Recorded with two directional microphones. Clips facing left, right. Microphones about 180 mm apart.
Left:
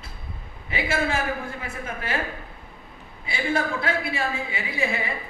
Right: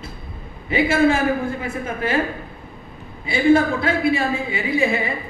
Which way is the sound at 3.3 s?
25° right (ahead or behind).